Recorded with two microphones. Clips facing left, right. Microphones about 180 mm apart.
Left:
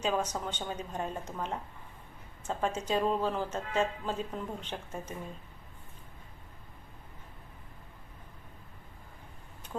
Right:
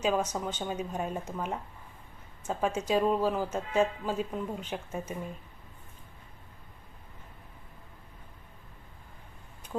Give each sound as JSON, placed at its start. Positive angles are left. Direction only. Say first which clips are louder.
{"t": 0.0, "sound": "speech", "louder": "right 3 dB", "side_deg": -10}